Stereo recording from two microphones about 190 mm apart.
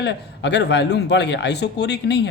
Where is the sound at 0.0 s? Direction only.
65° left (ahead or behind).